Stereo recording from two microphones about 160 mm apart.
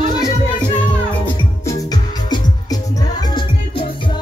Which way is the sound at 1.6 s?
20° left (ahead or behind).